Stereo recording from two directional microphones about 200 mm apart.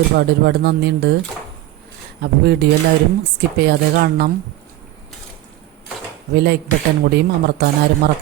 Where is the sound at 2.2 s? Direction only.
55° right (ahead or behind).